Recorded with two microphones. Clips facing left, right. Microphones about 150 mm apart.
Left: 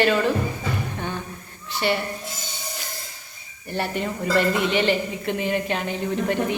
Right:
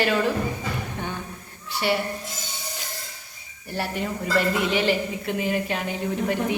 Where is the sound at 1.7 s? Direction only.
10° right (ahead or behind).